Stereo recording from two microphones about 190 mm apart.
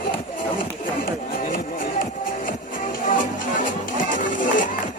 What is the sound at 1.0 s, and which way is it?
Music, 45° left (ahead or behind).